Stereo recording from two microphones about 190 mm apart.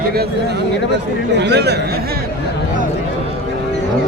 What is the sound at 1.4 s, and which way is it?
Speech, 60° right (ahead or behind).